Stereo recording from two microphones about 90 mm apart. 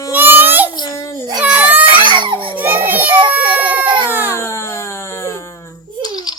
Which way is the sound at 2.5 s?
20° right (ahead or behind).